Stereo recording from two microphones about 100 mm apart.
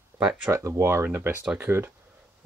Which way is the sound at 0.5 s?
30° right (ahead or behind).